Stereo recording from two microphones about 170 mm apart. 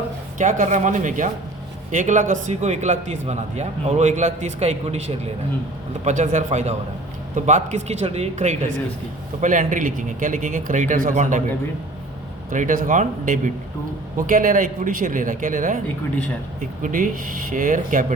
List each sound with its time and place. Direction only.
0.3 s a man's voice: 45° right (ahead or behind)
12.5 s a man's voice: 50° right (ahead or behind)
16.8 s a man's voice: 50° right (ahead or behind)